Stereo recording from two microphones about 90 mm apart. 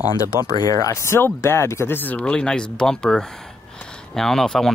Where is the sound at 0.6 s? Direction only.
40° left (ahead or behind); by 2.3 s 20° left (ahead or behind).